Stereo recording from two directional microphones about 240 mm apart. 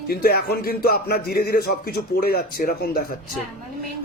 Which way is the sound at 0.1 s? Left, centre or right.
Left.